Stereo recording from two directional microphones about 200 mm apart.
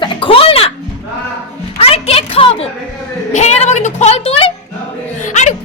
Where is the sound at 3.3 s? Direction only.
35° left (ahead or behind).